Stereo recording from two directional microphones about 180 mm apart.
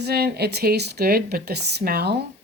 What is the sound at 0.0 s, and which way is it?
A woman's voice, 60° right (ahead or behind).